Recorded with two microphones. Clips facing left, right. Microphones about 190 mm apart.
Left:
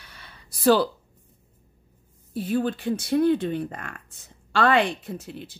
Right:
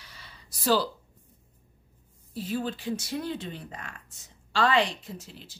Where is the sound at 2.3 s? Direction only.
55° left (ahead or behind).